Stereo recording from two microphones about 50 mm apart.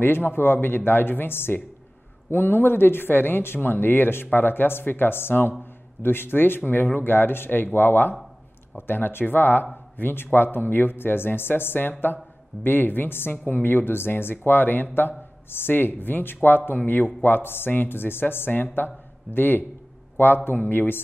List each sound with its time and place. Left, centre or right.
0.0 s a woman's voice: left